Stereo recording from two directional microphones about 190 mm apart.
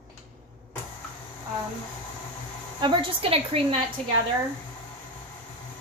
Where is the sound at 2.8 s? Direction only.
25° right (ahead or behind).